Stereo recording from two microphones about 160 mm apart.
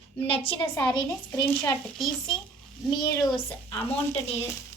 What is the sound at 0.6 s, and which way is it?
Speech, 10° left (ahead or behind).